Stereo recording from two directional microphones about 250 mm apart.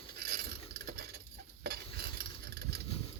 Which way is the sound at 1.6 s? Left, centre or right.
Right.